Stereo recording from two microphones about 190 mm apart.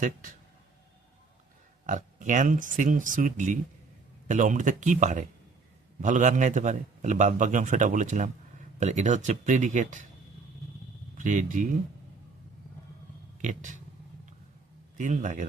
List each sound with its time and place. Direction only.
0.0 s speech: 45° right (ahead or behind)
1.9 s a man's voice: 40° right (ahead or behind)
11.2 s speech: 40° right (ahead or behind)
13.4 s a man's voice: 40° right (ahead or behind)
14.9 s a man's voice: 40° right (ahead or behind)